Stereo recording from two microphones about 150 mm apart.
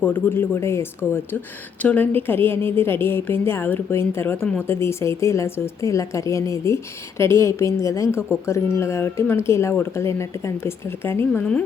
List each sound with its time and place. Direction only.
0.0 s a woman's voice: 15° left (ahead or behind)